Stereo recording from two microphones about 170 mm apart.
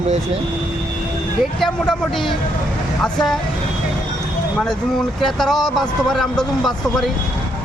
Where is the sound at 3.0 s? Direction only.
5° left (ahead or behind).